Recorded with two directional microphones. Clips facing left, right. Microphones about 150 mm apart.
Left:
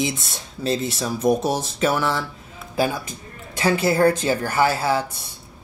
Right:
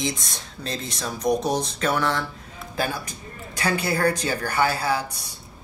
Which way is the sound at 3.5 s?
25° left (ahead or behind).